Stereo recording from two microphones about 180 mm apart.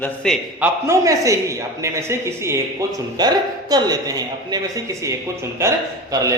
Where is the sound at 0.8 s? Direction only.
15° right (ahead or behind).